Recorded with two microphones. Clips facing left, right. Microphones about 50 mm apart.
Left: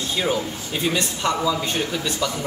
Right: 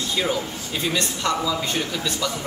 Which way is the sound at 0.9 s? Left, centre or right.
Centre.